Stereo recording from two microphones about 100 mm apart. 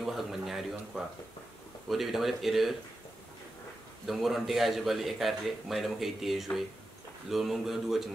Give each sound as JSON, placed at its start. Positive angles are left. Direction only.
{"t": 0.0, "sound": "a man's voice", "side_deg": 0}
{"t": 4.0, "sound": "a man's voice", "side_deg": 0}